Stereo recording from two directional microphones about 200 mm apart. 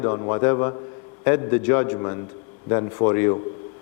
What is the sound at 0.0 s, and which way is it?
A man's voice, 25° left (ahead or behind).